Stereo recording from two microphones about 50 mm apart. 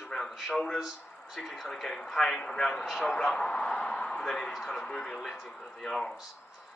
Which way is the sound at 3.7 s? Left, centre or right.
Left.